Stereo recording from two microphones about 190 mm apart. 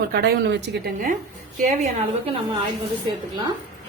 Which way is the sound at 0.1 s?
60° right (ahead or behind).